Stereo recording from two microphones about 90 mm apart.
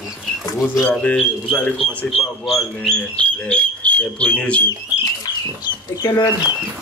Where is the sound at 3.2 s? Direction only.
15° left (ahead or behind).